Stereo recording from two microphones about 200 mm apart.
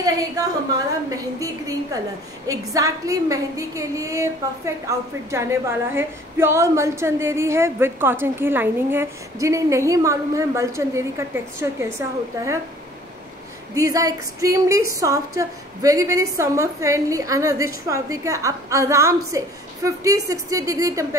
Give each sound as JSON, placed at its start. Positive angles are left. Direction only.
{"t": 0.4, "sound": "a woman's voice", "side_deg": -15}
{"t": 13.7, "sound": "a woman's voice", "side_deg": -15}